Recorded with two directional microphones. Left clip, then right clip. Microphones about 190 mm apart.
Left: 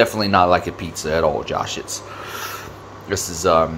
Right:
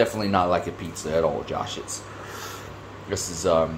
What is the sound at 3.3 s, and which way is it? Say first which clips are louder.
Speech: left 5 dB; 35° left (ahead or behind).